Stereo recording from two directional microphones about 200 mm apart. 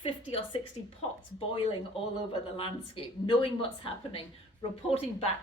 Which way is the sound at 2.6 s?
25° left (ahead or behind).